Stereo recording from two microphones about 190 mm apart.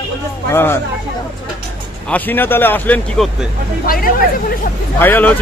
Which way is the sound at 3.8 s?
50° left (ahead or behind).